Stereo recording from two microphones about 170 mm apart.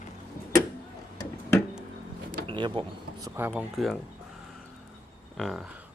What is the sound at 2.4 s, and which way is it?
Speech, 30° right (ahead or behind).